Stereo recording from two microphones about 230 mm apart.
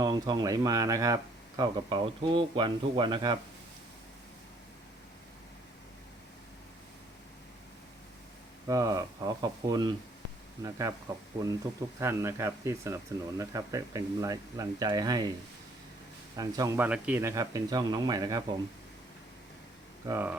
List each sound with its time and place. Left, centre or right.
0.0 s speech: centre
8.6 s speech: centre
16.3 s speech: centre
20.1 s speech: centre